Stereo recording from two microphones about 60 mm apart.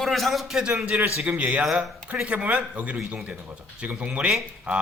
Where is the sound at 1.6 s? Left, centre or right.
Centre.